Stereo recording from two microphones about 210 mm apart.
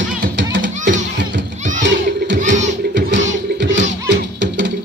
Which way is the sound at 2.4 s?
35° right (ahead or behind).